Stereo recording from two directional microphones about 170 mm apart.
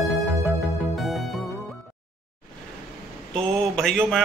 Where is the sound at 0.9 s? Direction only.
Centre (ahead or behind).